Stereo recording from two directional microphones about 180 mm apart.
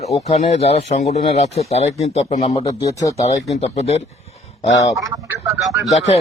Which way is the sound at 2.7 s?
20° left (ahead or behind).